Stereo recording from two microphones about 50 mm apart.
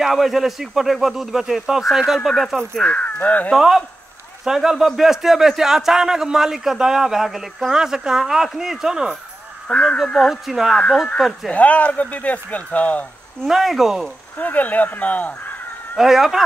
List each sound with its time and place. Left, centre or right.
0.0 s speech: centre
2.9 s speech: left
3.5 s speech: centre
9.7 s speech: centre
9.9 s speech: centre
11.5 s speech: left
13.5 s speech: centre
14.4 s speech: left
16.0 s speech: centre